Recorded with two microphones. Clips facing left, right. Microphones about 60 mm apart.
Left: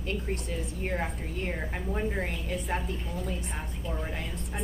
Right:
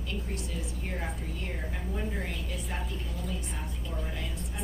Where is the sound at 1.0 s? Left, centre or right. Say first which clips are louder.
Left 4 dB; left.